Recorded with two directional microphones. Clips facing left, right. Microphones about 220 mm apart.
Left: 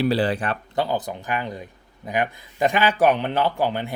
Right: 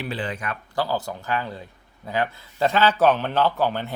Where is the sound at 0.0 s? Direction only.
35° left (ahead or behind).